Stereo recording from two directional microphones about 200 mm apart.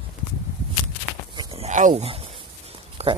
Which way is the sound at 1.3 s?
30° right (ahead or behind).